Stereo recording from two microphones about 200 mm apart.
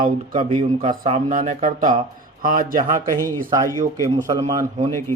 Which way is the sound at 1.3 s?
40° right (ahead or behind).